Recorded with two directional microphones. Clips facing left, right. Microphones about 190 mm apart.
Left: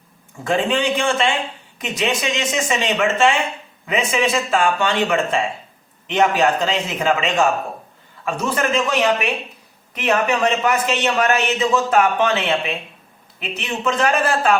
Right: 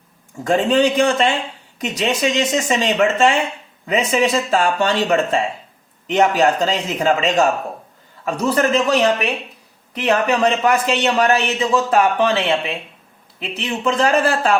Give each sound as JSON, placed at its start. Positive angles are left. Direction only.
{"t": 0.4, "sound": "a man's voice", "side_deg": -40}
{"t": 13.4, "sound": "a man's voice", "side_deg": -30}